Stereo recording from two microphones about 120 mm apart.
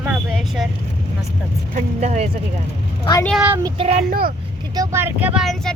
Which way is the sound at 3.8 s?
60° right (ahead or behind).